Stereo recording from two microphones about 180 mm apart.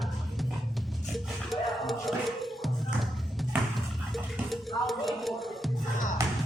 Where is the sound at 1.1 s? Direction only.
Centre (ahead or behind).